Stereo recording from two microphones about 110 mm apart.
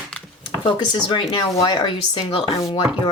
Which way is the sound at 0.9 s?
45° left (ahead or behind).